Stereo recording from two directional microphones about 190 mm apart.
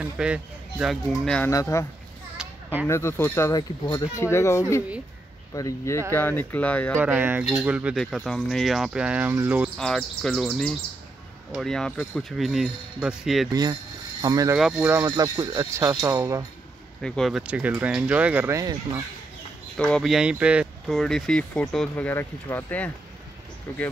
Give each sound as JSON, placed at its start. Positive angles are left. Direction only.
{"t": 0.0, "sound": "speech", "side_deg": -5}
{"t": 1.5, "sound": "speech", "side_deg": 15}
{"t": 2.3, "sound": "children playing", "side_deg": -5}
{"t": 2.9, "sound": "speech", "side_deg": 15}
{"t": 7.0, "sound": "speech", "side_deg": -10}
{"t": 9.8, "sound": "speech", "side_deg": 5}
{"t": 13.5, "sound": "speech", "side_deg": -20}
{"t": 14.6, "sound": "speech", "side_deg": -5}
{"t": 17.0, "sound": "speech", "side_deg": 5}
{"t": 19.8, "sound": "speech", "side_deg": 0}